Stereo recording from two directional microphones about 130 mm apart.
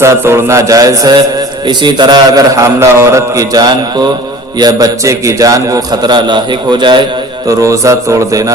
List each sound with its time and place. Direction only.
0.0 s a man's voice: 20° right (ahead or behind); by 7.0 s 35° right (ahead or behind)
7.4 s a man's voice: 25° right (ahead or behind)